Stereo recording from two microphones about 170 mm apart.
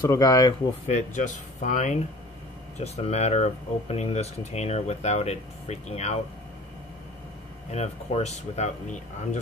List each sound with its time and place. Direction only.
0.0 s speech: 25° left (ahead or behind)
0.8 s speech: 45° left (ahead or behind)
7.7 s speech: 40° left (ahead or behind)